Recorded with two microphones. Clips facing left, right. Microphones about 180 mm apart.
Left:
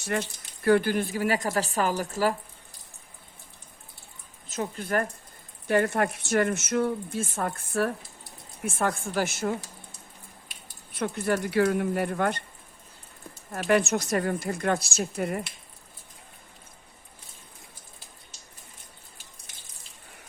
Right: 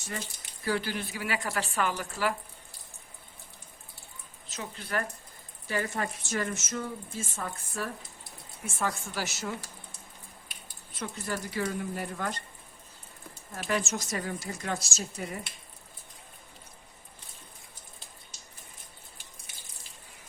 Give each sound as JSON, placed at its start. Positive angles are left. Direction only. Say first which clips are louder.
{"t": 0.0, "sound": "speech", "louder": "left 9 dB", "side_deg": 70}
{"t": 4.4, "sound": "speech", "louder": "left 9 dB", "side_deg": 50}
{"t": 5.6, "sound": "speech", "louder": "left 8 dB", "side_deg": 60}
{"t": 10.9, "sound": "speech", "louder": "left 8 dB", "side_deg": 60}
{"t": 13.7, "sound": "speech", "louder": "left 8 dB", "side_deg": 60}